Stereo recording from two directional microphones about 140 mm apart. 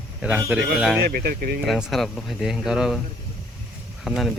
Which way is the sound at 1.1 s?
90° right.